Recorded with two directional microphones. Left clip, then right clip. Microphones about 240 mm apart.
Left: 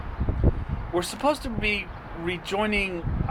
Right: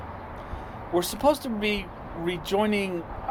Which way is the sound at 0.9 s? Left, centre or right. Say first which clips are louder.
Right 2 dB; right.